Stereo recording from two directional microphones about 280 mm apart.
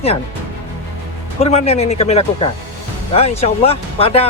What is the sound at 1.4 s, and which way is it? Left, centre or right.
Speech, left.